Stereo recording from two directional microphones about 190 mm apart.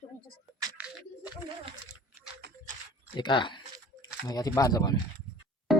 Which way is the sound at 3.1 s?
25° left (ahead or behind).